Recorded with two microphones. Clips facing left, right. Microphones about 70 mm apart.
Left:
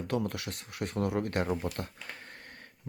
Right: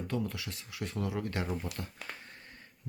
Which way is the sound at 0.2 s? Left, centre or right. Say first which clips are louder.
Left 2 dB; left.